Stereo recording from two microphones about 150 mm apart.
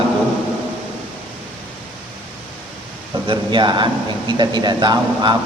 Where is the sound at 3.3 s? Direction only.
30° right (ahead or behind).